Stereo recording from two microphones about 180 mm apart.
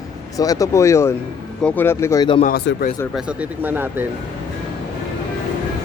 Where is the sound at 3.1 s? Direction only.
10° right (ahead or behind).